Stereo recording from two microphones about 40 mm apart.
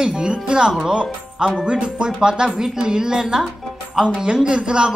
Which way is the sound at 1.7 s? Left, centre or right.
Right.